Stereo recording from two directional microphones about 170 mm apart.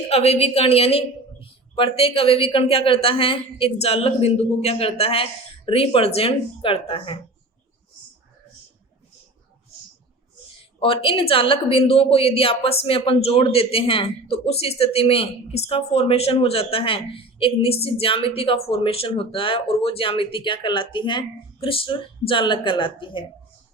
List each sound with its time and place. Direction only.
0.1 s speech: 35° left (ahead or behind)
10.8 s speech: 30° left (ahead or behind)